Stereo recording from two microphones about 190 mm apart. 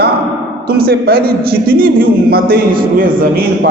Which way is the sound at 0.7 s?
55° right (ahead or behind).